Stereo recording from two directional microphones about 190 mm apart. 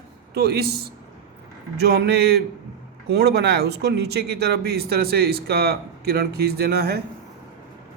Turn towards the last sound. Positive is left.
turn(degrees=-55)  # may be behind; listen again after turning